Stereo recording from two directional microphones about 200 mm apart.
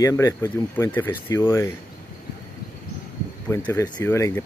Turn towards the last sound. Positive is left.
turn(degrees=15)  # may be behind; listen again after turning